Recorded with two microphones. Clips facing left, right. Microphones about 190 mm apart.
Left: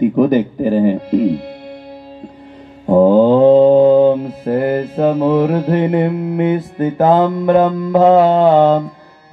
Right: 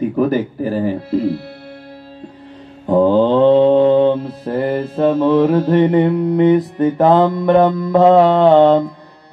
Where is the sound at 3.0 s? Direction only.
10° left (ahead or behind).